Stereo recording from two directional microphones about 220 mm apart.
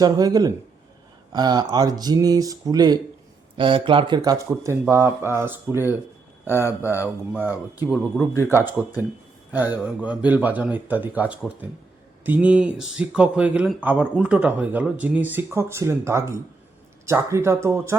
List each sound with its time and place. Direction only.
0.0 s speech: 15° right (ahead or behind)
7.3 s speech: 10° right (ahead or behind)